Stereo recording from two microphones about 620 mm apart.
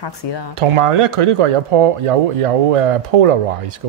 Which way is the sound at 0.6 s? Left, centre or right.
Right.